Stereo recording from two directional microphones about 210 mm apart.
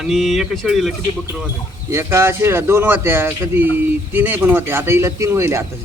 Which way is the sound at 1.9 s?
10° right (ahead or behind).